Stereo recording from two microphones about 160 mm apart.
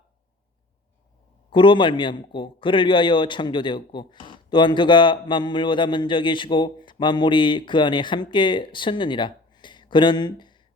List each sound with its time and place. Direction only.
1.5 s a man's voice: 30° left (ahead or behind)